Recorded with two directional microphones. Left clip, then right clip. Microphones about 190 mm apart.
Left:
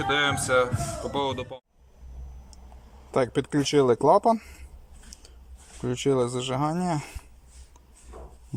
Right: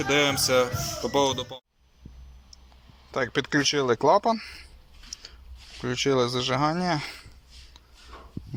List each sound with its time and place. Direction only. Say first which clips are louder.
0.0 s speech: right 1 dB; 5° right (ahead or behind)
3.1 s speech: left 1 dB; 20° left (ahead or behind)
5.8 s speech: right 1 dB; 15° left (ahead or behind)